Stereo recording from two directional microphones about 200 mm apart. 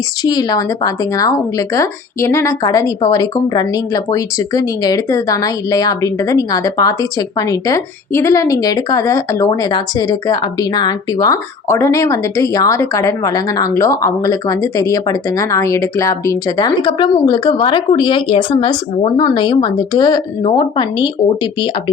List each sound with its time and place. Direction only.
0.2 s speech: 20° left (ahead or behind)